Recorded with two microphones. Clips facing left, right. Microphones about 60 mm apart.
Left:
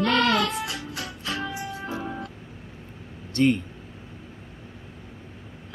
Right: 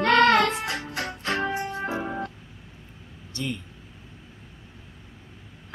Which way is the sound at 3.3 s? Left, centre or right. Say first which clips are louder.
Left 11 dB; left.